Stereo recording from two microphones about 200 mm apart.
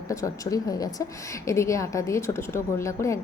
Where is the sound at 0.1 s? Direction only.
15° left (ahead or behind).